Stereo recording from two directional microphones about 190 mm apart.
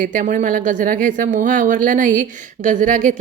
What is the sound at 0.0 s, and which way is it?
A woman's voice, 45° right (ahead or behind).